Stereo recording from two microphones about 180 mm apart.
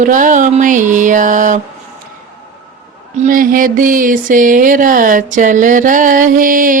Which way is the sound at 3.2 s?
50° right (ahead or behind).